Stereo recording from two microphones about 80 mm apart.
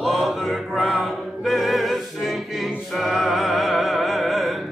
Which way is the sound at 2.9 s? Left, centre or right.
Centre.